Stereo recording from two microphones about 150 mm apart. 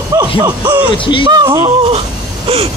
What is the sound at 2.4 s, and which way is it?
Gasp, 40° right (ahead or behind).